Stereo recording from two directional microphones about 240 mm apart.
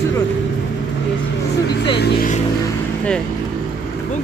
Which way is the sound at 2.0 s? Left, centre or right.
Left.